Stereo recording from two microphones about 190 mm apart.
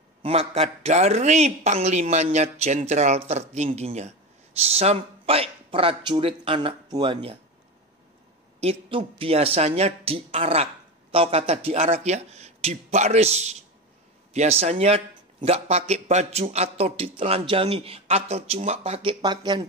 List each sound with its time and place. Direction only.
0.2 s speech: 30° right (ahead or behind)
8.5 s speech: 30° right (ahead or behind)